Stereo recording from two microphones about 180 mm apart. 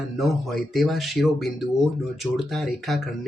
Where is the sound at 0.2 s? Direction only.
Centre (ahead or behind).